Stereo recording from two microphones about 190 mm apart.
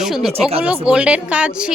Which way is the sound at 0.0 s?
Centre (ahead or behind).